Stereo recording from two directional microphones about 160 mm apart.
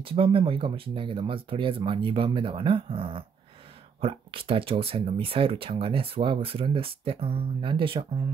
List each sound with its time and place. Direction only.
0.0 s speech: 35° right (ahead or behind)